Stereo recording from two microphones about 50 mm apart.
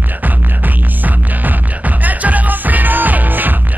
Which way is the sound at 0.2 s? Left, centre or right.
Right.